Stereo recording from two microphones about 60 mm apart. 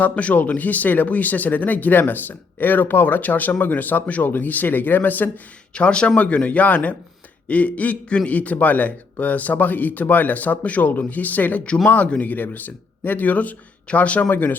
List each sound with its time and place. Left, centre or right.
0.0 s speech: left
5.7 s speech: centre